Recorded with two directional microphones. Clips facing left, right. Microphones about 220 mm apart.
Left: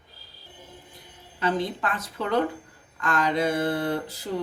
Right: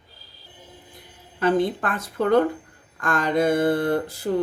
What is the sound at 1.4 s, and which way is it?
Speech, 50° right (ahead or behind).